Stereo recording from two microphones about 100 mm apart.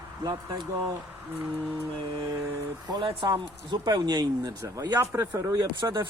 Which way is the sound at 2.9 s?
50° right (ahead or behind).